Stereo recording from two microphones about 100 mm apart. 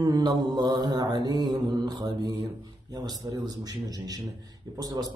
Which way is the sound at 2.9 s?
40° right (ahead or behind).